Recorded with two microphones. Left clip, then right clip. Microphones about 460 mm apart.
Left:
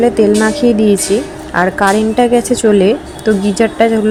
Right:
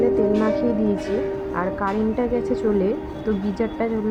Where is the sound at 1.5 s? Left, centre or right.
Right.